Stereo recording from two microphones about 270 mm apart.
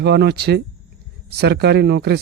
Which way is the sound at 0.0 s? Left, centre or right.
Right.